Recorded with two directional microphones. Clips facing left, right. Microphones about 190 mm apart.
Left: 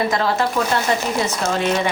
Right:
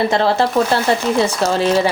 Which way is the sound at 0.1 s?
30° right (ahead or behind).